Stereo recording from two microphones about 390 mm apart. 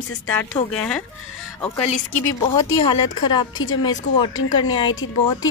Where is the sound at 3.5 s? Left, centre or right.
Left.